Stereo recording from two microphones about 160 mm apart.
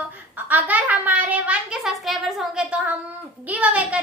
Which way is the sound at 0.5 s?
10° right (ahead or behind).